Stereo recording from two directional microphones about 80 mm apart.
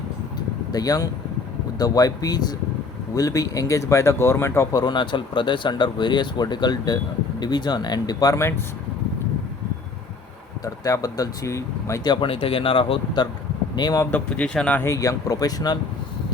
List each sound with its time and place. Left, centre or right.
0.7 s speech: left
3.2 s speech: left
4.7 s speech: left
8.4 s speech: left
10.6 s speech: left
12.0 s speech: left
13.7 s speech: left
14.1 s speech: centre
14.8 s speech: left